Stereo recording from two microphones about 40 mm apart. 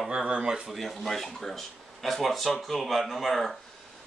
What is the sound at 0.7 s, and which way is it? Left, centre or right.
Speech, centre.